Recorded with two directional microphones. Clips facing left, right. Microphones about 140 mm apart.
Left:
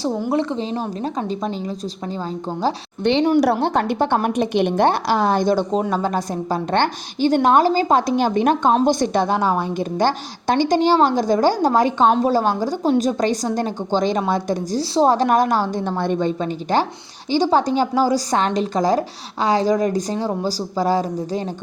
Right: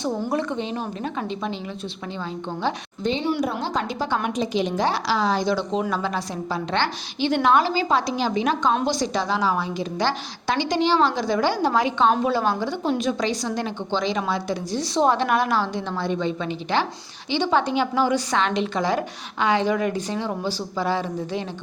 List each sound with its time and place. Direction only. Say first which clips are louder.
0.0 s a woman's voice: left 4 dB; 30° left (ahead or behind)
3.0 s speech: left 8 dB; 80° left
3.4 s a woman's voice: left 7 dB; 65° left (ahead or behind); by 14.8 s 45° left (ahead or behind)
14.8 s a woman's voice: left 4 dB; 30° left (ahead or behind)